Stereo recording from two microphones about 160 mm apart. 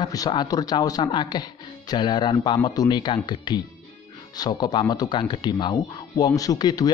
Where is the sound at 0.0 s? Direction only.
25° left (ahead or behind).